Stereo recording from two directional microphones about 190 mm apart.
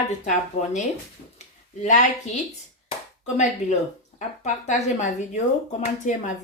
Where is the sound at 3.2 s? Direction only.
40° left (ahead or behind).